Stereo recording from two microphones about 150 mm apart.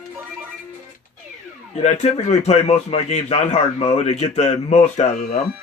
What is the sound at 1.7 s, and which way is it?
A man's voice, 50° left (ahead or behind).